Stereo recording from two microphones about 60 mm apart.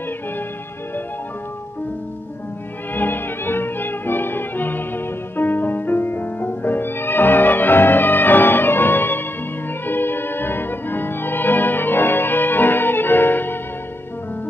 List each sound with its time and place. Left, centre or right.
2.9 s music: left